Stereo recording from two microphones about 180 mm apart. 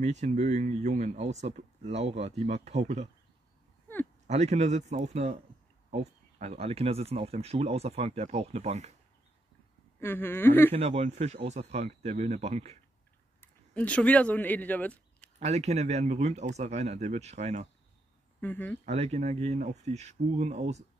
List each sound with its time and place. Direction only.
0.0 s speech: 40° right (ahead or behind)
4.3 s speech: 40° right (ahead or behind)
9.9 s a woman's voice: 10° left (ahead or behind)
10.7 s speech: 35° right (ahead or behind)
13.4 s speech: 5° left (ahead or behind)
15.3 s speech: 40° right (ahead or behind)
18.4 s a woman's voice: 10° left (ahead or behind)
18.9 s speech: 35° right (ahead or behind)